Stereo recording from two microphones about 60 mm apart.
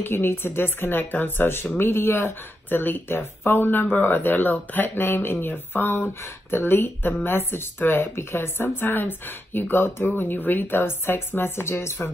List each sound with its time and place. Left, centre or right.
0.0 s speech: left